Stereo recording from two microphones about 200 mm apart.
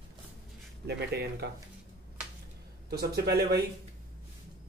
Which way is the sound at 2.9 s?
50° right (ahead or behind).